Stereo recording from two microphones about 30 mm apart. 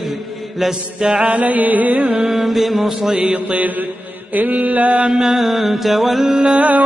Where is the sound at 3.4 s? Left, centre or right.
Right.